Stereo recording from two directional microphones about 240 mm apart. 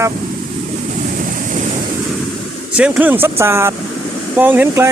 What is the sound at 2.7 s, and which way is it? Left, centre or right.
Speech, centre.